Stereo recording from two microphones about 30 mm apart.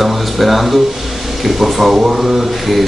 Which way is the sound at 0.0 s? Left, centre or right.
Centre.